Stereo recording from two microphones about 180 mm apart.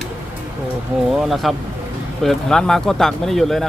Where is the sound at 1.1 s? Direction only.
Centre (ahead or behind).